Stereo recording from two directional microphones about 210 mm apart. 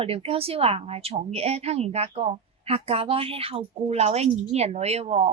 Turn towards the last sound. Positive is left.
turn(degrees=-30)  # may be behind; listen again after turning